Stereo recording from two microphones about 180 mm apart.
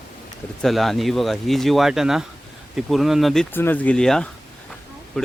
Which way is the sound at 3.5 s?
10° left (ahead or behind).